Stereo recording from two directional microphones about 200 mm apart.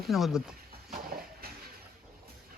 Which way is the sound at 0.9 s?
50° right (ahead or behind).